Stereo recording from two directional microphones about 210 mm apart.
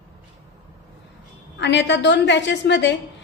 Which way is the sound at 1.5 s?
55° left (ahead or behind).